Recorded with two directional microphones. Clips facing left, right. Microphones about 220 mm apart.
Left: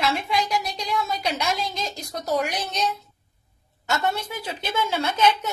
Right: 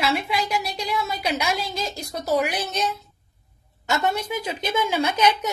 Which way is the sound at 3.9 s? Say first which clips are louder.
Right 2 dB; 15° right (ahead or behind).